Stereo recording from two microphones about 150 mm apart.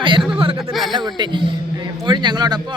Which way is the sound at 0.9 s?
30° right (ahead or behind).